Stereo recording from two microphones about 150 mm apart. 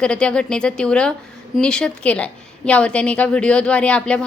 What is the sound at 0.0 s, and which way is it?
A woman's voice, 5° left (ahead or behind).